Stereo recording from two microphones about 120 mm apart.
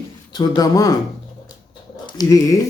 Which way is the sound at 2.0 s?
30° left (ahead or behind).